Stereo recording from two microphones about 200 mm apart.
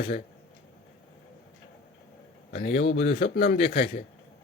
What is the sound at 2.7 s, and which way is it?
Speech, 60° left (ahead or behind).